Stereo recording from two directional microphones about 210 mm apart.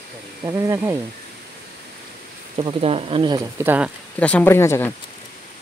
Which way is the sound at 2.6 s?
25° right (ahead or behind).